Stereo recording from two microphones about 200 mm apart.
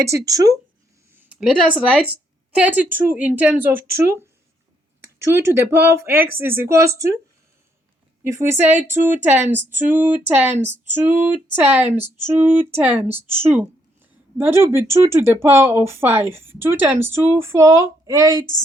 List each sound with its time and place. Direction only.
0.0 s speech: 15° right (ahead or behind)
1.1 s speech: 5° right (ahead or behind)
8.2 s speech: 15° right (ahead or behind)